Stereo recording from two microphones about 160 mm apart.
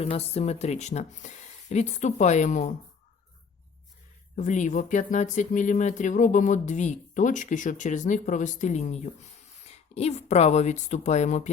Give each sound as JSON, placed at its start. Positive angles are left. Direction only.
{"t": 0.0, "sound": "speech", "side_deg": 40}
{"t": 4.4, "sound": "speech", "side_deg": 50}